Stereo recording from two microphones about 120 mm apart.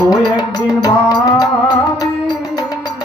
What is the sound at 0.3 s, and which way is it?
Music, 30° left (ahead or behind).